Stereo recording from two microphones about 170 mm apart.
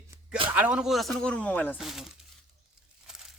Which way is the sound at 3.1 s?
5° right (ahead or behind).